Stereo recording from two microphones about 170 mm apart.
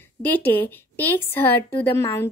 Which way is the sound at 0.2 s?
10° left (ahead or behind).